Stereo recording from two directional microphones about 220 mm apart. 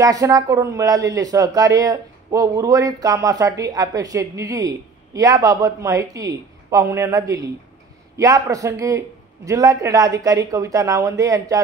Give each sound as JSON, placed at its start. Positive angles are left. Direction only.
{"t": 0.0, "sound": "speech", "side_deg": -15}